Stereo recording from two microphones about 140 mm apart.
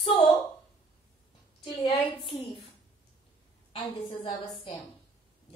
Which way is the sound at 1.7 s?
35° left (ahead or behind).